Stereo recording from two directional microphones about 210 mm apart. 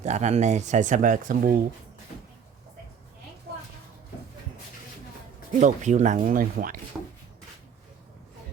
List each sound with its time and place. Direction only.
0.0 s speech: 35° right (ahead or behind)
5.5 s speech: 35° right (ahead or behind)
6.9 s rub: 5° right (ahead or behind)